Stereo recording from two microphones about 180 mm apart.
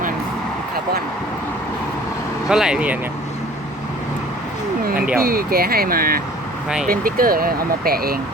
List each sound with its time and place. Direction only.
2.5 s speech: 5° right (ahead or behind)
4.9 s a sound: 5° right (ahead or behind)
5.2 s speech: 55° right (ahead or behind)